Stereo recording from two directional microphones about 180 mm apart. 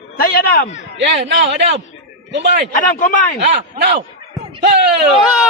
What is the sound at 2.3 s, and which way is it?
Speech, 70° right (ahead or behind).